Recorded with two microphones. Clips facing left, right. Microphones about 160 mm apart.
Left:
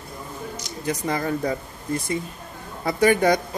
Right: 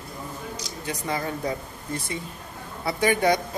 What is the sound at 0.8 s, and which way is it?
Speech, 45° left (ahead or behind).